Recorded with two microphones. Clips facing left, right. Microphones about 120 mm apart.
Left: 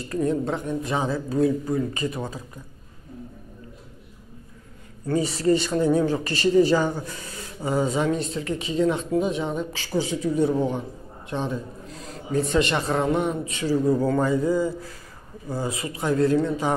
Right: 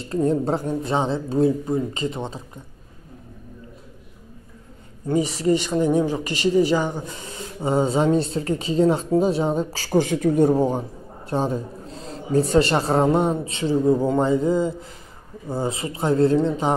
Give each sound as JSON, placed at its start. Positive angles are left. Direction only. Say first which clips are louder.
{"t": 0.0, "sound": "speech", "louder": "right 3 dB", "side_deg": -25}
{"t": 5.0, "sound": "speech", "louder": "right 1 dB", "side_deg": -15}
{"t": 9.9, "sound": "speech", "louder": "right 5 dB", "side_deg": -55}